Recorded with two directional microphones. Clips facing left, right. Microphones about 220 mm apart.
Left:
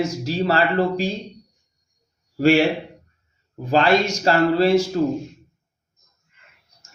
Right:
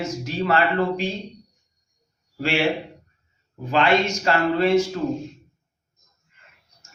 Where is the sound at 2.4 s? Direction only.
40° left (ahead or behind).